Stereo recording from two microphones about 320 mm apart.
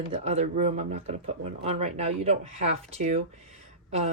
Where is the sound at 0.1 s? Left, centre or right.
Centre.